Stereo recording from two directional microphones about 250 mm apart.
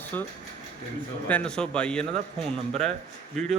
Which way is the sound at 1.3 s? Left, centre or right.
Centre.